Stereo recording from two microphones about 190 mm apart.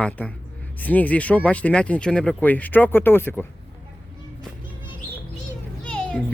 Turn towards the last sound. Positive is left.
turn(degrees=5)  # may be behind; listen again after turning